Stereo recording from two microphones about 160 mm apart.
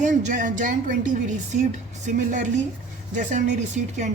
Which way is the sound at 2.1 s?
50° right (ahead or behind).